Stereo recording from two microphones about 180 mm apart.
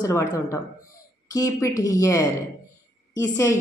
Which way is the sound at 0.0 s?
15° left (ahead or behind).